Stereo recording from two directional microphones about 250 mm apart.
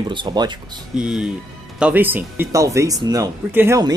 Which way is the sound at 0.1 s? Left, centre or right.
Centre.